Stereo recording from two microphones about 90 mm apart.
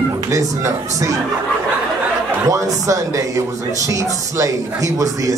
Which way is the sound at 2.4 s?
40° right (ahead or behind).